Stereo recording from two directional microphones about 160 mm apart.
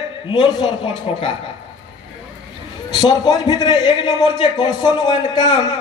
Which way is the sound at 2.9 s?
25° left (ahead or behind).